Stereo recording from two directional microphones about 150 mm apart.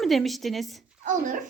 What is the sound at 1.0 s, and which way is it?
Speech, 65° right (ahead or behind).